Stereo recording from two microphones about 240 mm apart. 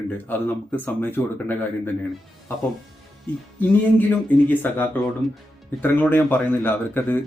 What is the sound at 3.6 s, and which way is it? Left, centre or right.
Speech, centre.